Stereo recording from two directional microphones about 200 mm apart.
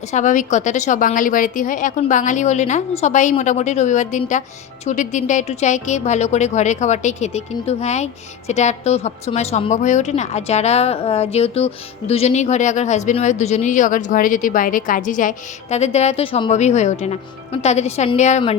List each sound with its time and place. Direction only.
0.1 s speech: 40° left (ahead or behind)